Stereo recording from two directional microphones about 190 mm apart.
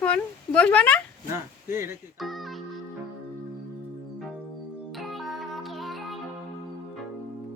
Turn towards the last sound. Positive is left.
turn(degrees=0)  # may be behind; listen again after turning